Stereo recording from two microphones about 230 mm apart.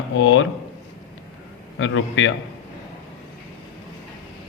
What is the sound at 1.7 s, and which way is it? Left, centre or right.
Speech, left.